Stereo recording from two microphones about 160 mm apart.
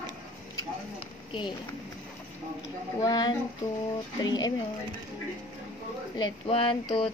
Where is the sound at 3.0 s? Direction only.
25° left (ahead or behind).